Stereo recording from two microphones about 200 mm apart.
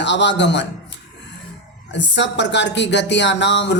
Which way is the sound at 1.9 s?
65° left (ahead or behind).